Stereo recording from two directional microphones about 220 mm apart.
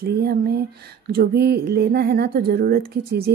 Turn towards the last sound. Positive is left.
turn(degrees=-45)  # may be behind; listen again after turning